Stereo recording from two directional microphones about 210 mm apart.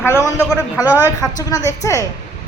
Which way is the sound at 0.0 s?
15° left (ahead or behind).